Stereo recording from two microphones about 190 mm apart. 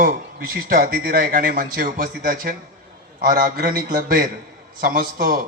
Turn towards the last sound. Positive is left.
turn(degrees=-50)  # may be behind; listen again after turning